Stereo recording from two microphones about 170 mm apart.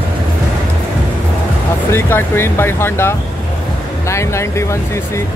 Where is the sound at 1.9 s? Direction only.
15° left (ahead or behind).